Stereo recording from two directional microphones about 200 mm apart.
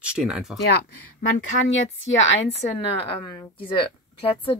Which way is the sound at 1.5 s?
40° left (ahead or behind).